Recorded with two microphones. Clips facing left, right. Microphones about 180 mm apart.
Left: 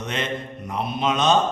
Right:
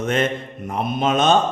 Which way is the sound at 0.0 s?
50° right (ahead or behind).